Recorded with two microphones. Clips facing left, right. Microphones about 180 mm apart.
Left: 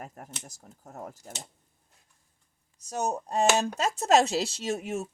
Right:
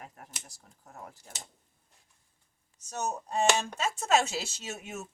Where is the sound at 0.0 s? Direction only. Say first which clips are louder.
Left 6 dB; 45° left (ahead or behind).